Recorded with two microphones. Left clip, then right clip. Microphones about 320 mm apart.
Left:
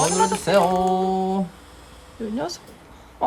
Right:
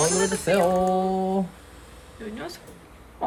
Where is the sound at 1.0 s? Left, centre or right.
Left.